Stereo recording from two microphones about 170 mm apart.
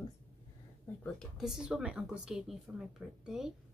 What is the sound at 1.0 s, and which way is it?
Speech, centre (ahead or behind).